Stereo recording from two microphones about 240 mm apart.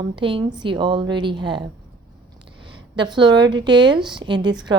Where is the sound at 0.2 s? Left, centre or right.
Centre.